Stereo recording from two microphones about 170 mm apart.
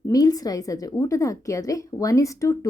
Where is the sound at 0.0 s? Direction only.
20° left (ahead or behind).